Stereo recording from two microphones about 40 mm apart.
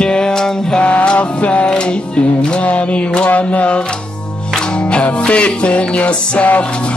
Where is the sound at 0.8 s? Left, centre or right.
Left.